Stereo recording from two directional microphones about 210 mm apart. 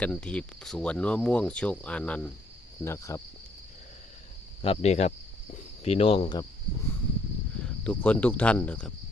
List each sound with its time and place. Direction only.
0.0 s speech: 5° left (ahead or behind)
4.6 s speech: 30° left (ahead or behind)
7.9 s speech: 5° left (ahead or behind)